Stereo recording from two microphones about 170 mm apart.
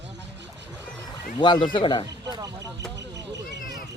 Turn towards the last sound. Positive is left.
turn(degrees=-90)